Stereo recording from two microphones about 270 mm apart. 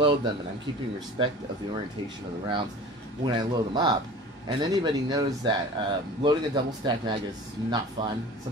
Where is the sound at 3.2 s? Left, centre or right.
Centre.